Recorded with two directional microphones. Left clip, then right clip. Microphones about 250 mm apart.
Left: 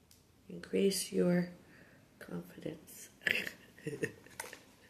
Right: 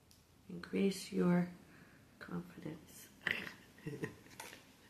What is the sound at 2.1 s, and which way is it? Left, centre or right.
Whispering, centre.